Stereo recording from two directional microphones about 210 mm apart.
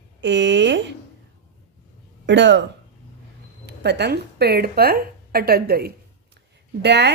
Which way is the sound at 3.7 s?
55° right (ahead or behind).